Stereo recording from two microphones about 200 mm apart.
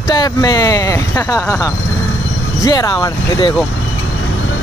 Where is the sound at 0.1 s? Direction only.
20° left (ahead or behind).